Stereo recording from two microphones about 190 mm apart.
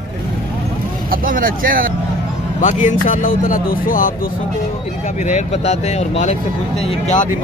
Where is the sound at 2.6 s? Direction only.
40° left (ahead or behind).